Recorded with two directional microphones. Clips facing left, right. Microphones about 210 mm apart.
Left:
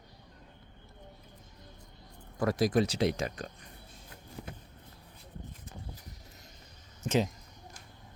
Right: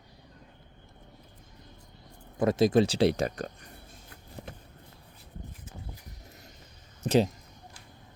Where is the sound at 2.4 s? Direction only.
25° right (ahead or behind); by 3.5 s 40° right (ahead or behind).